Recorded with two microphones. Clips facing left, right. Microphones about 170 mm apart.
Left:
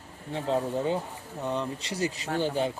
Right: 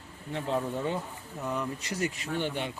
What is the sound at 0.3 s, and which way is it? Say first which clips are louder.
A man's voice: left 3 dB; 35° left (ahead or behind).